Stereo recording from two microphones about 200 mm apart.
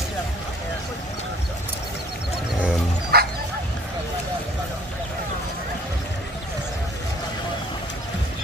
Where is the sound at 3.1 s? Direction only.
50° right (ahead or behind).